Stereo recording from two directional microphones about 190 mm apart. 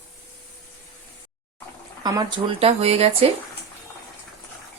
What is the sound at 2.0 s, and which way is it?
Speech, 20° right (ahead or behind).